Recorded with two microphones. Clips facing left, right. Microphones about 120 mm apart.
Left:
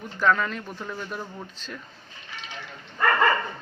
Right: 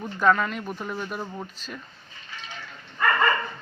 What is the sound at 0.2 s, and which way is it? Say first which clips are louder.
Speech: right 1 dB; 10° right (ahead or behind).